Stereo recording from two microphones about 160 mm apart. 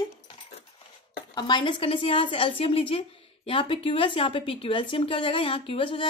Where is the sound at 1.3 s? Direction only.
30° left (ahead or behind).